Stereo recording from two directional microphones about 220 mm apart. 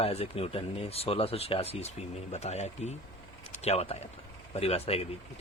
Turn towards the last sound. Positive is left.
turn(degrees=25)  # may be behind; listen again after turning